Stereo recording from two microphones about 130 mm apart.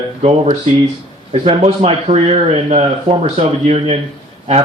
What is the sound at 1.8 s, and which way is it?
Speech, 55° right (ahead or behind).